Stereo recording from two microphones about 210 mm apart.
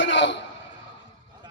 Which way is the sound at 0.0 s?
60° left (ahead or behind).